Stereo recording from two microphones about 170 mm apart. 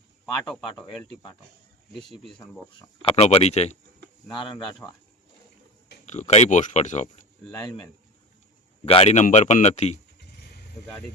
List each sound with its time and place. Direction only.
1.9 s speech: centre (ahead or behind)
3.0 s speech: 35° left (ahead or behind)
4.5 s speech: 20° left (ahead or behind)
6.1 s speech: 45° left (ahead or behind)
8.9 s speech: 40° left (ahead or behind)